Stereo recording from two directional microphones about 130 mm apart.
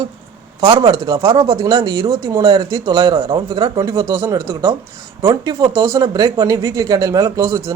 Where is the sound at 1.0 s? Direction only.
25° right (ahead or behind).